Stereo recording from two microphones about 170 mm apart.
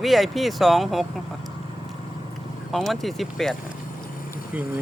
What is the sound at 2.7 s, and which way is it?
Speech, centre (ahead or behind).